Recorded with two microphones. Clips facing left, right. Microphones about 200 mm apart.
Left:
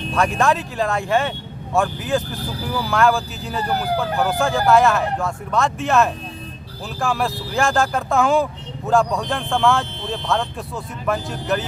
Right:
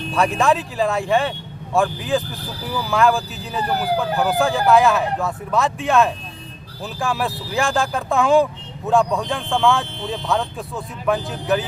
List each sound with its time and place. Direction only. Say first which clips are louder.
0.1 s speech: right 1 dB; centre (ahead or behind)